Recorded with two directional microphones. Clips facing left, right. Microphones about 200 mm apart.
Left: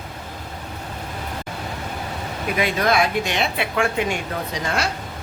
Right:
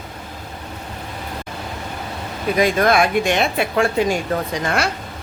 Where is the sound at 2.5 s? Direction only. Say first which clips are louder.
Right 4 dB; 45° right (ahead or behind).